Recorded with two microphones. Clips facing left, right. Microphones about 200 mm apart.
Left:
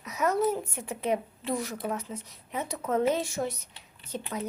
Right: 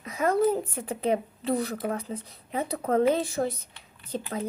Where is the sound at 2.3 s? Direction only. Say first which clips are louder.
Right 5 dB; 35° right (ahead or behind).